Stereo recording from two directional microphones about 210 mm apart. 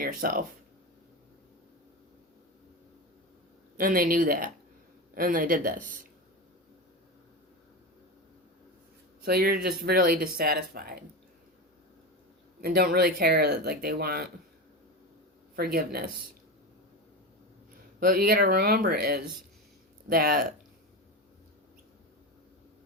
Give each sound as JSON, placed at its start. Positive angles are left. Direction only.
{"t": 0.0, "sound": "speech", "side_deg": -45}
{"t": 3.8, "sound": "speech", "side_deg": -40}
{"t": 9.2, "sound": "speech", "side_deg": -45}
{"t": 12.6, "sound": "speech", "side_deg": -45}
{"t": 15.5, "sound": "speech", "side_deg": -45}
{"t": 18.0, "sound": "speech", "side_deg": -45}